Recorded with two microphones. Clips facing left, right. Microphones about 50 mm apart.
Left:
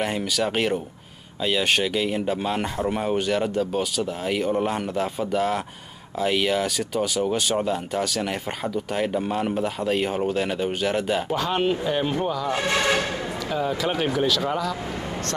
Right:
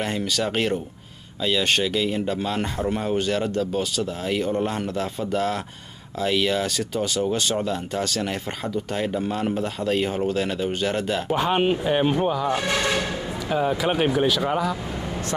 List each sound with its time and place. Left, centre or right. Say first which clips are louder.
0.0 s speech: left 1 dB; centre
11.3 s speech: right 5 dB; right
12.5 s speech: left 1 dB; centre
13.5 s speech: right 3 dB; centre